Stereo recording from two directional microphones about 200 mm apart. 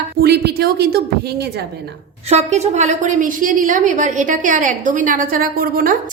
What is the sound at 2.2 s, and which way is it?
A woman's voice, 30° right (ahead or behind).